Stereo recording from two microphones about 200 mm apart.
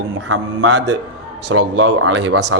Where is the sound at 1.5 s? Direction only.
60° right (ahead or behind).